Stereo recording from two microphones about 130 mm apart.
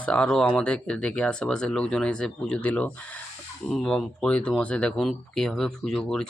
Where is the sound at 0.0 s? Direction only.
10° left (ahead or behind).